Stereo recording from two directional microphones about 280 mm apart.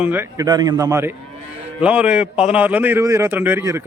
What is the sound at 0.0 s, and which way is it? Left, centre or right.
A man's voice, centre.